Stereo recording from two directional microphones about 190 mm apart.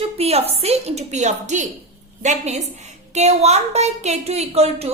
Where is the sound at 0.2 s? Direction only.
35° right (ahead or behind).